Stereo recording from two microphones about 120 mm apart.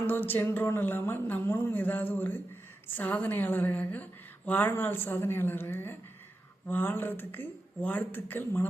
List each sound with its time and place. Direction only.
0.1 s a woman's voice: 15° left (ahead or behind)